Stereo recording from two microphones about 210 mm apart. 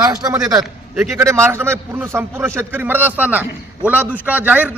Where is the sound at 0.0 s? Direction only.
20° right (ahead or behind).